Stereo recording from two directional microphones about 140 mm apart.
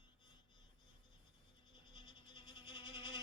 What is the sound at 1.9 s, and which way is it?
Insect, 35° left (ahead or behind).